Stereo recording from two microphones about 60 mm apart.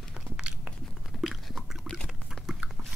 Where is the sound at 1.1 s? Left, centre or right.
Centre.